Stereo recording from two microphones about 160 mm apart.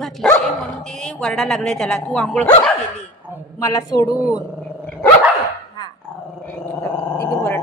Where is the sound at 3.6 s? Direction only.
20° left (ahead or behind).